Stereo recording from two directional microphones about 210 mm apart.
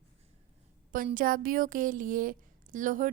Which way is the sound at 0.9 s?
40° right (ahead or behind).